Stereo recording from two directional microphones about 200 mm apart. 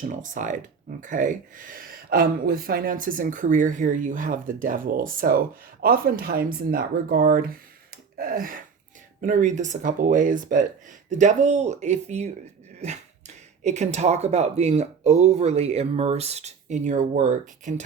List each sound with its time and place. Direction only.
0.0 s speech: 40° right (ahead or behind)